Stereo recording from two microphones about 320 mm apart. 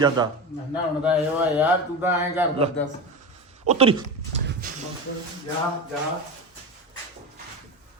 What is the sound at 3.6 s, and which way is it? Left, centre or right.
Speech, centre.